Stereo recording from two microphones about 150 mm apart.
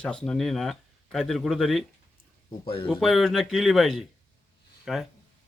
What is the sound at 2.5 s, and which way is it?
Speech, 35° left (ahead or behind).